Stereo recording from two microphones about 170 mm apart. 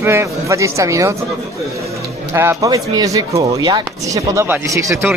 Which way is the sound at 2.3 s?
15° right (ahead or behind).